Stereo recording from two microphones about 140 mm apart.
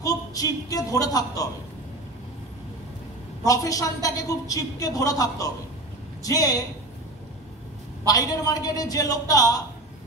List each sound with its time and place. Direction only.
0.0 s a woman's voice: 25° left (ahead or behind)
3.4 s a man's voice: 25° left (ahead or behind)
8.1 s a man's voice: 25° left (ahead or behind)